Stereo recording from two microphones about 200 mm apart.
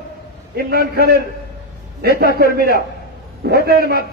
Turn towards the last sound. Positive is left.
turn(degrees=-50)  # may be behind; listen again after turning